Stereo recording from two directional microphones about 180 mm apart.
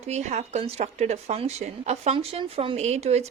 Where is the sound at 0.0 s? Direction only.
40° right (ahead or behind).